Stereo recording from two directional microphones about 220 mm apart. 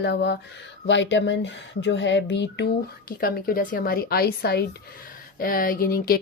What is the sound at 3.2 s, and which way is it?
A woman's voice, 40° left (ahead or behind).